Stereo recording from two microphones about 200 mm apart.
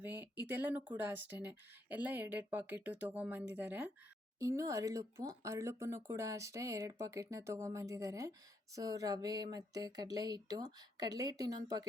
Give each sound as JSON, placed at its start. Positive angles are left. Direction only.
{"t": 0.0, "sound": "speech", "side_deg": -10}